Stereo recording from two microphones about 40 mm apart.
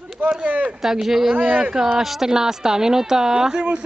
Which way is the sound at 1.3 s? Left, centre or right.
Right.